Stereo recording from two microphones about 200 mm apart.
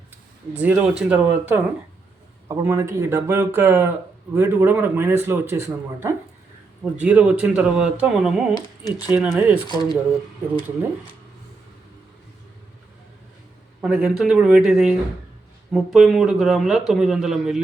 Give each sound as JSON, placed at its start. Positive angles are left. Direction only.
{"t": 0.5, "sound": "a man's voice", "side_deg": -5}
{"t": 9.6, "sound": "speech", "side_deg": 20}
{"t": 13.8, "sound": "a man's voice", "side_deg": -5}